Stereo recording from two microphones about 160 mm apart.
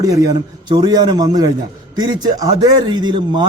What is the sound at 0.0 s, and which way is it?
A man's voice, 20° right (ahead or behind).